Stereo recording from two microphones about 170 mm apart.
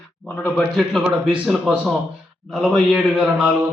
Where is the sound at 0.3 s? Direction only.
10° left (ahead or behind).